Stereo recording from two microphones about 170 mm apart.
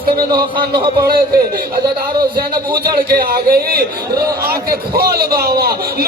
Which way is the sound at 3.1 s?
65° right (ahead or behind).